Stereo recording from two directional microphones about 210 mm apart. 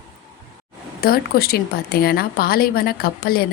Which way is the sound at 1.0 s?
45° left (ahead or behind).